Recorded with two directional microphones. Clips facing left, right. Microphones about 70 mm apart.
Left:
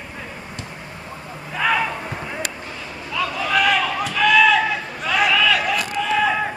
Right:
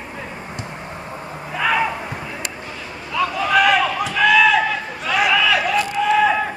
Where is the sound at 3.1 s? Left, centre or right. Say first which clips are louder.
Right 3 dB; centre.